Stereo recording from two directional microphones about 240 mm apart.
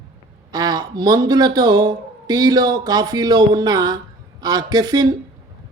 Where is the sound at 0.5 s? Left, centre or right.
Centre.